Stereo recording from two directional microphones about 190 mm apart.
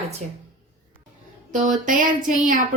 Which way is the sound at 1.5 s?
45° right (ahead or behind).